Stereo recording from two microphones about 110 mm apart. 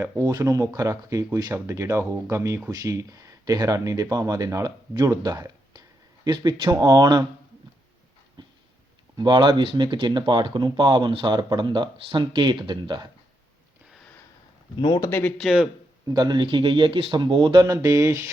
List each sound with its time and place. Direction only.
0.0 s speech: 30° right (ahead or behind)
8.4 s a sound: 45° right (ahead or behind)
9.1 s speech: 40° right (ahead or behind)
14.8 s speech: 45° left (ahead or behind)
15.0 s speech: 20° left (ahead or behind)
15.4 s a man's voice: centre (ahead or behind)
16.1 s speech: 40° right (ahead or behind)